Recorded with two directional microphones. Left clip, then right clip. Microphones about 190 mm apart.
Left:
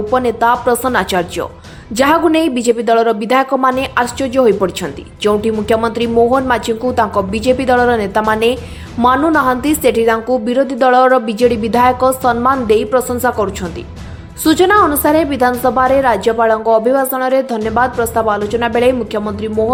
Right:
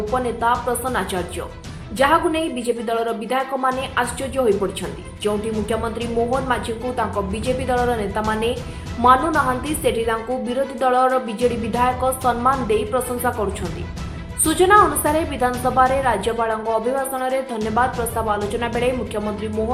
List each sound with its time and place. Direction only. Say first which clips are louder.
0.1 s a woman's voice: left 8 dB; 50° left (ahead or behind)
14.4 s a woman's voice: left 4 dB; 40° left (ahead or behind)